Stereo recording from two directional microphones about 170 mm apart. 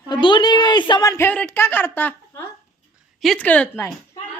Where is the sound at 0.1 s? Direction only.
25° left (ahead or behind); by 2.1 s 10° left (ahead or behind).